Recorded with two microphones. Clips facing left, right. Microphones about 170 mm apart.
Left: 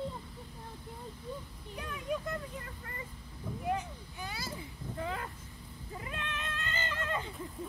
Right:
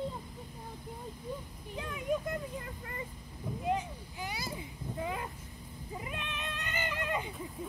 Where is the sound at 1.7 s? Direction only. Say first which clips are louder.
Right 3 dB; 15° right (ahead or behind).